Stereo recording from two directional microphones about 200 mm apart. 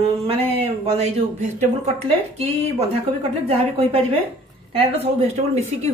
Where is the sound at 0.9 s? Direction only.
35° right (ahead or behind).